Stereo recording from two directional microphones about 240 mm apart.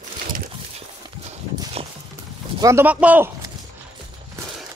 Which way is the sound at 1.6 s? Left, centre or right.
Right.